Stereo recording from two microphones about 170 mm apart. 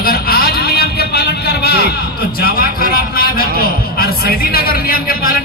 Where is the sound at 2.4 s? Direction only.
60° left (ahead or behind).